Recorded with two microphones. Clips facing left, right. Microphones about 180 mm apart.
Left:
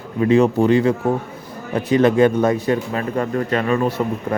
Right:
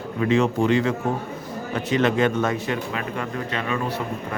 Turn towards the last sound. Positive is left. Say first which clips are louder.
# left 8 dB
turn(degrees=45)  # may be behind; listen again after turning